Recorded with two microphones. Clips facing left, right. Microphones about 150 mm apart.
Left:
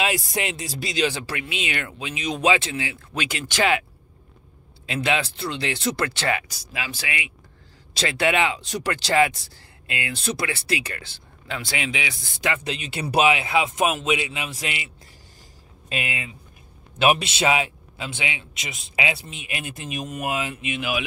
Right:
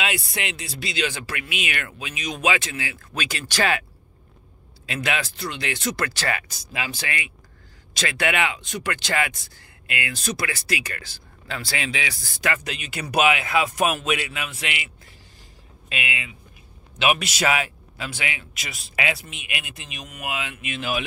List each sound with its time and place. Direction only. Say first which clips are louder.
0.4 s speech: left 3 dB; 40° left (ahead or behind); by 3.8 s 20° left (ahead or behind)
4.8 s speech: left 3 dB; 25° left (ahead or behind)
6.5 s speech: right 2 dB; centre (ahead or behind)
7.9 s speech: left 3 dB; 30° left (ahead or behind)
15.9 s speech: left 1 dB; 40° left (ahead or behind)
17.2 s speech: left 1 dB; 25° left (ahead or behind)